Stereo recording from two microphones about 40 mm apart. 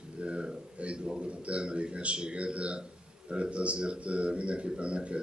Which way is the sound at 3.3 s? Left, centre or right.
Right.